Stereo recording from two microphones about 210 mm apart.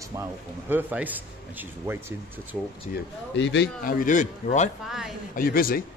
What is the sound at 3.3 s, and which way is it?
Speech, 60° left (ahead or behind).